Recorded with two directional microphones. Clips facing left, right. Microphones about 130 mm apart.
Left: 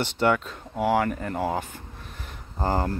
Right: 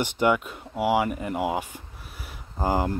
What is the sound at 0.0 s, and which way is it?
Speech, 10° right (ahead or behind).